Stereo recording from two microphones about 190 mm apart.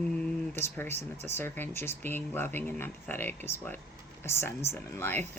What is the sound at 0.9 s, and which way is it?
Speech, 35° right (ahead or behind).